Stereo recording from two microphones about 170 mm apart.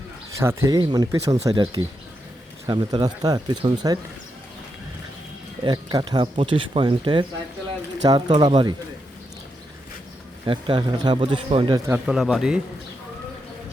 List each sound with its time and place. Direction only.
0.3 s speech: 15° right (ahead or behind)
5.6 s speech: 25° right (ahead or behind)
10.4 s speech: 25° right (ahead or behind)
12.0 s speech: centre (ahead or behind)